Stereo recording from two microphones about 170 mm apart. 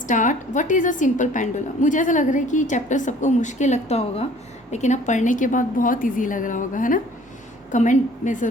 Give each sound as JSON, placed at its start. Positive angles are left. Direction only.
{"t": 0.1, "sound": "a woman's voice", "side_deg": 45}